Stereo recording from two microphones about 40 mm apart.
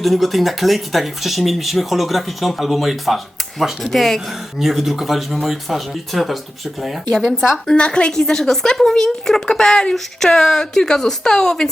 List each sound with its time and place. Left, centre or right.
0.0 s speech: centre
4.6 s speech: centre
7.8 s a woman's voice: left